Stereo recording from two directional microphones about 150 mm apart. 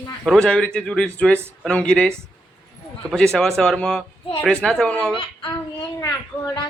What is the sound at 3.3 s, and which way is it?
A man's voice, 5° left (ahead or behind).